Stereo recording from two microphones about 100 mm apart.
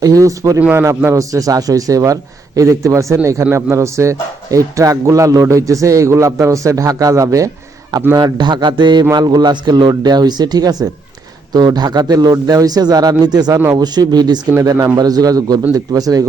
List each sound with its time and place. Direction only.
0.0 s speech: 35° right (ahead or behind)
0.6 s speech: 20° right (ahead or behind)
0.9 s speech: 35° right (ahead or behind)
8.1 s a man's voice: 50° right (ahead or behind)